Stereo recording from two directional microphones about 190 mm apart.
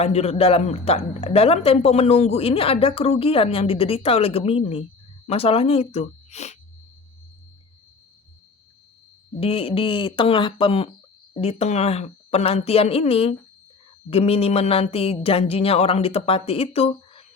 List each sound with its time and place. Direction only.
0.0 s speech: 35° left (ahead or behind)
9.3 s speech: 30° left (ahead or behind)